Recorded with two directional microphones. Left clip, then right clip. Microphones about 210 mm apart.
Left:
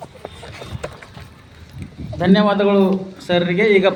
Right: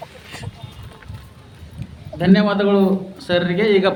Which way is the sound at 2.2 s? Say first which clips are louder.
Left 2 dB; 5° left (ahead or behind).